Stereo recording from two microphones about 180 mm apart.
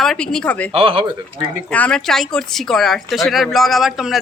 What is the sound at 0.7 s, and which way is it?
Speech, 30° right (ahead or behind).